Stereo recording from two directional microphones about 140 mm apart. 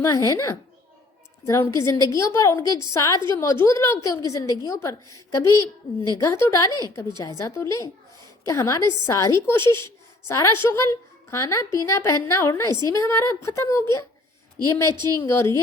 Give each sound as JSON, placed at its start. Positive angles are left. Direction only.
{"t": 0.3, "sound": "a woman's voice", "side_deg": 20}
{"t": 14.9, "sound": "a woman's voice", "side_deg": -30}
{"t": 15.3, "sound": "a woman's voice", "side_deg": 20}